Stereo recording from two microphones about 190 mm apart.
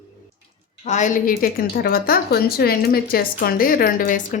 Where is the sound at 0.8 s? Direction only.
40° left (ahead or behind).